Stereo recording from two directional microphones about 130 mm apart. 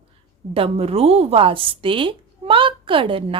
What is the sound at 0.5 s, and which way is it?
A woman's voice, 50° right (ahead or behind).